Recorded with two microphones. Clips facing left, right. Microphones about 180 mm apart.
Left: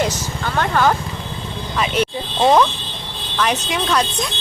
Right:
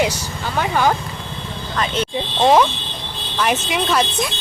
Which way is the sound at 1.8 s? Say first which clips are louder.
Left 2 dB; 10° left (ahead or behind).